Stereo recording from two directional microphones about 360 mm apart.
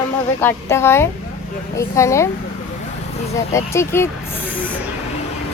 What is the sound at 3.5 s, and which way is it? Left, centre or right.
Speech, centre.